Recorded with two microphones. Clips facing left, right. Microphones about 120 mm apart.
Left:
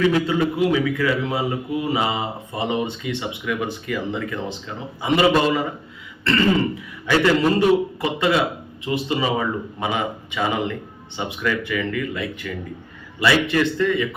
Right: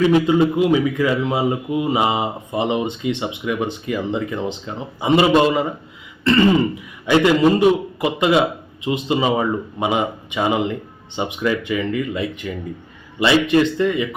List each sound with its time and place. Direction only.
0.0 s speech: 20° right (ahead or behind)